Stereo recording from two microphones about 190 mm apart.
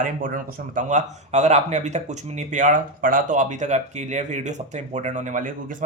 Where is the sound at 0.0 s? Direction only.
45° right (ahead or behind).